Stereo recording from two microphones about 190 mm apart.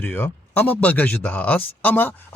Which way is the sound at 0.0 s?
10° left (ahead or behind).